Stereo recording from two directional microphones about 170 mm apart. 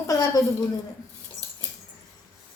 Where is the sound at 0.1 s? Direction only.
20° left (ahead or behind).